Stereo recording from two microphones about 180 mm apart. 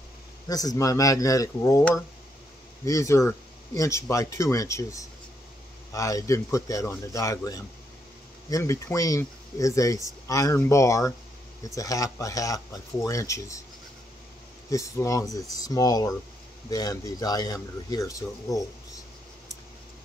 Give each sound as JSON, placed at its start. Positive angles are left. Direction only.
{"t": 0.5, "sound": "speech", "side_deg": 20}
{"t": 14.7, "sound": "speech", "side_deg": 20}